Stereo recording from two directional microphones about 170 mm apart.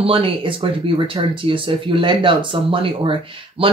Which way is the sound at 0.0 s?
30° right (ahead or behind).